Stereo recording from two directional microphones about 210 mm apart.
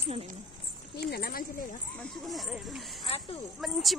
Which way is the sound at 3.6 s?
Centre (ahead or behind).